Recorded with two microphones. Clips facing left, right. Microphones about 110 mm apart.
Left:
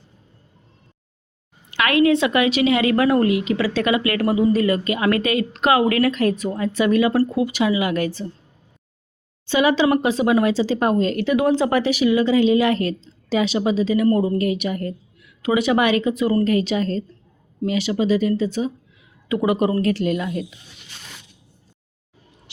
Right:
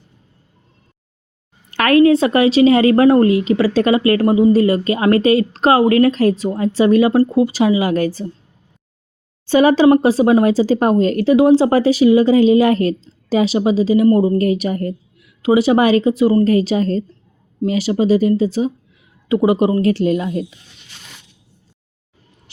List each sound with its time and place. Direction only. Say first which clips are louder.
1.7 s a woman's voice: right 6 dB; 40° right (ahead or behind)
9.5 s a woman's voice: right 6 dB; 40° right (ahead or behind); by 14.3 s 25° right (ahead or behind)
14.3 s a woman's voice: right 5 dB; 40° right (ahead or behind)